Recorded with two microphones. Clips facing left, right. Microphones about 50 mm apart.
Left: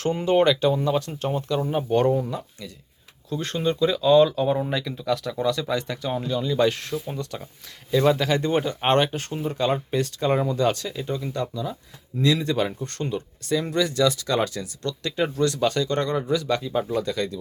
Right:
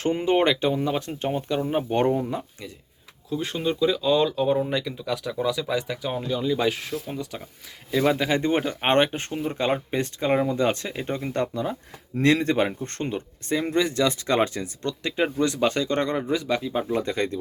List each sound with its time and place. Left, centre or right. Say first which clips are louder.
0.0 s speech: left 1 dB; right
3.2 s speech: left 1 dB; centre
16.9 s speech: right 1 dB; right